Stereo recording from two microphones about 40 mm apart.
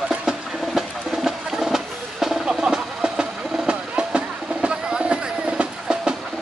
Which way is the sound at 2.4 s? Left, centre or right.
Centre.